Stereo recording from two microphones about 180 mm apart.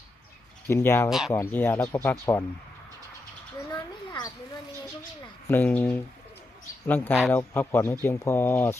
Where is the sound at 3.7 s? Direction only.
25° left (ahead or behind).